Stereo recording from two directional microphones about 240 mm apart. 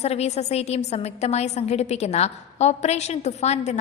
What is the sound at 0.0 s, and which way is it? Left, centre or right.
A woman's voice, left.